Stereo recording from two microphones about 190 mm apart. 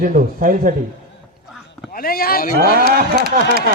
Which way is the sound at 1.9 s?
50° left (ahead or behind).